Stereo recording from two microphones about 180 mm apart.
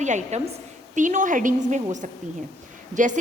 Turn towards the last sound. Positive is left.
turn(degrees=-45)  # may be behind; listen again after turning